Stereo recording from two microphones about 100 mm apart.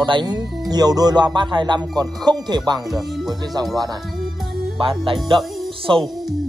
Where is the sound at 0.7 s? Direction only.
40° right (ahead or behind).